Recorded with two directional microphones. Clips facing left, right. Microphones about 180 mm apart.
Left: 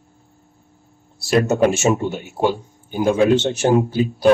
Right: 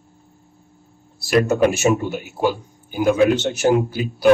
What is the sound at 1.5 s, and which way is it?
A man's voice, 25° left (ahead or behind).